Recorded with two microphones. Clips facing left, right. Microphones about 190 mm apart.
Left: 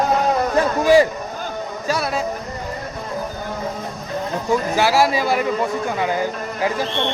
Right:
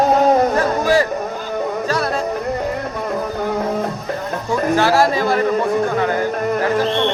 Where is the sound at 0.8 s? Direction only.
15° left (ahead or behind).